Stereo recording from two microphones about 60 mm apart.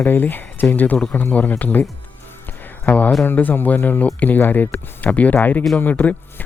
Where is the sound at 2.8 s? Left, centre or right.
Left.